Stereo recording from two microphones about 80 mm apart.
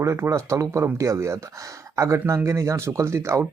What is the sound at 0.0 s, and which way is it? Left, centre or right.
Speech, right.